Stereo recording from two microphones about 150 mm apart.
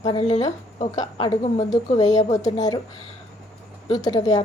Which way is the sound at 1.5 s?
50° left (ahead or behind).